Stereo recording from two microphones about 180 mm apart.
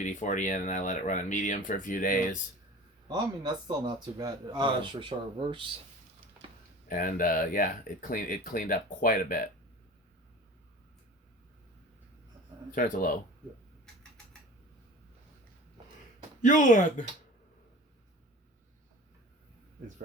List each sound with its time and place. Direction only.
0.0 s speech: 45° left (ahead or behind)
3.1 s speech: 25° right (ahead or behind)
6.8 s speech: 50° left (ahead or behind)
12.7 s speech: 50° left (ahead or behind)
16.4 s speech: 45° left (ahead or behind)